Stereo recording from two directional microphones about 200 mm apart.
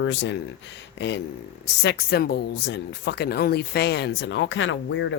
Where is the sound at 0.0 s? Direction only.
65° left (ahead or behind).